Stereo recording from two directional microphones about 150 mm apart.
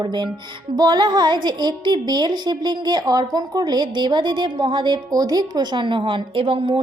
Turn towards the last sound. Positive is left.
turn(degrees=-35)  # may be behind; listen again after turning